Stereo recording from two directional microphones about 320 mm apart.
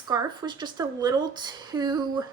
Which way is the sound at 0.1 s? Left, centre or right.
Centre.